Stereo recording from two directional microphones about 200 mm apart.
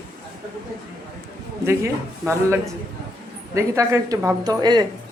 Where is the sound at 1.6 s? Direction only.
15° right (ahead or behind).